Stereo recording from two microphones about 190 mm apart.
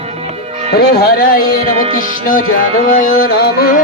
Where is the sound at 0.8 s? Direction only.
55° left (ahead or behind).